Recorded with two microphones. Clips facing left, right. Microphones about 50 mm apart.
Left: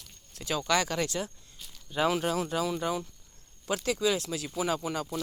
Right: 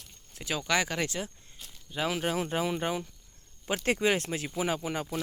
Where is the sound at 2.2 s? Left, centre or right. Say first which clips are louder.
Even; centre.